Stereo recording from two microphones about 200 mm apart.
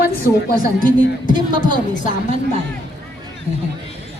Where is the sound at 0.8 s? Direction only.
40° left (ahead or behind).